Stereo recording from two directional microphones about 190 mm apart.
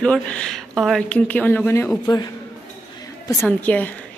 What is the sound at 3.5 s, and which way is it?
Speech, 10° left (ahead or behind).